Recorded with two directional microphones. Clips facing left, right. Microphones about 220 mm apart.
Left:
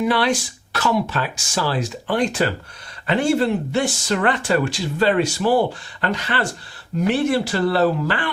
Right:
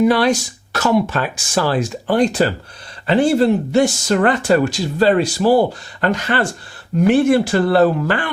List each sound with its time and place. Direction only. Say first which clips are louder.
0.0 s speech: right 5 dB; 40° right (ahead or behind)